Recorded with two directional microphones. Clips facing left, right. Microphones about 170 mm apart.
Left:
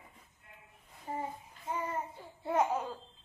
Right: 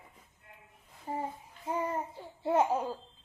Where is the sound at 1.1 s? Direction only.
35° right (ahead or behind).